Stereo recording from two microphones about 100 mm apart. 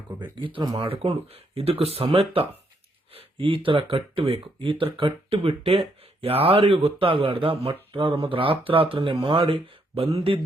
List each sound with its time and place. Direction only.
0.2 s speech: 55° right (ahead or behind)
0.8 s speech: 70° right (ahead or behind)